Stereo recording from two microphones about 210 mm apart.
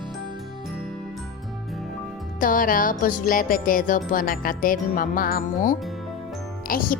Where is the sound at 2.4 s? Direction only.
40° left (ahead or behind).